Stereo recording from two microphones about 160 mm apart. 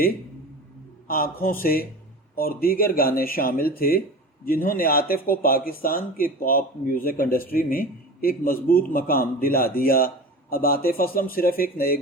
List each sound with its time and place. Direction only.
1.0 s speech: 65° left (ahead or behind)